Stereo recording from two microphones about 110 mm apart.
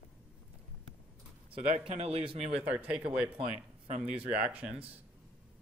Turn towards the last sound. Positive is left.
turn(degrees=-15)  # may be behind; listen again after turning